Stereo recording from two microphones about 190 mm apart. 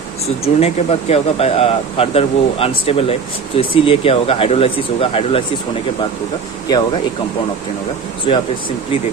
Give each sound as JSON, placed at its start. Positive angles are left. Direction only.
{"t": 0.6, "sound": "speech", "side_deg": 35}
{"t": 6.7, "sound": "speech", "side_deg": 20}